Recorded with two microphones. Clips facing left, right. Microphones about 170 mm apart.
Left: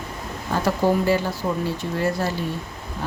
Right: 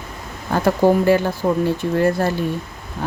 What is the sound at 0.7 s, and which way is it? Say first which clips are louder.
Speech: right 5 dB; 55° right (ahead or behind).